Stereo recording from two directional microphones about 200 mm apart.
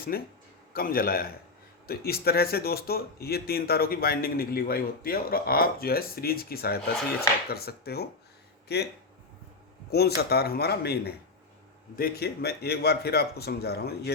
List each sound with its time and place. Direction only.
0.1 s speech: 50° left (ahead or behind)
10.2 s speech: 50° left (ahead or behind)